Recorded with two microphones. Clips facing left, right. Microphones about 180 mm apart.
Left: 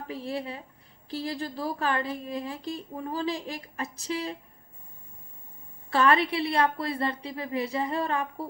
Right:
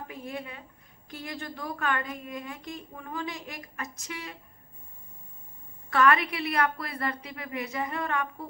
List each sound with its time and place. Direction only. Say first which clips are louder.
0.1 s a woman's voice: left 9 dB; 30° left (ahead or behind)
5.9 s a woman's voice: left 1 dB; 30° left (ahead or behind)